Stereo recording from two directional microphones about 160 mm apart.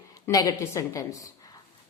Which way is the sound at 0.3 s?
20° left (ahead or behind).